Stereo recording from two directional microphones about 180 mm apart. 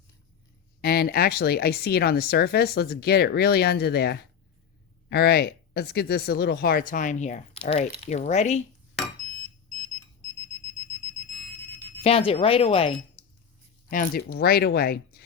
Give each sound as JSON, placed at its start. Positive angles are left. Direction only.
{"t": 0.8, "sound": "speech", "side_deg": 60}
{"t": 10.7, "sound": "alarm", "side_deg": 10}
{"t": 12.0, "sound": "speech", "side_deg": 30}
{"t": 13.9, "sound": "speech", "side_deg": 50}